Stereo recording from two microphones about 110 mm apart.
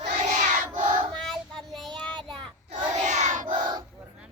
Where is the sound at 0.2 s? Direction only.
90° right.